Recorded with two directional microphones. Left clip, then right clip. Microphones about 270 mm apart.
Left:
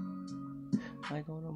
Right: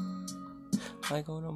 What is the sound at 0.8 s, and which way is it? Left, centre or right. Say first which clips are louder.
Music: right 8 dB; centre.